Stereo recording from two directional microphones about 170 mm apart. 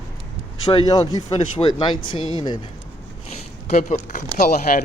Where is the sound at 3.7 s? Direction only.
45° left (ahead or behind).